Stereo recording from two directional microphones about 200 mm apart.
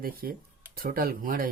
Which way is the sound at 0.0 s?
45° right (ahead or behind).